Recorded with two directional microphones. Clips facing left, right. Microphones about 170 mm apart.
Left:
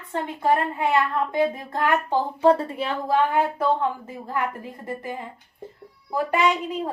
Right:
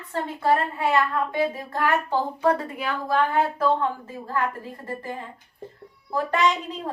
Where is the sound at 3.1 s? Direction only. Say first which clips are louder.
Left 1 dB; 15° left (ahead or behind).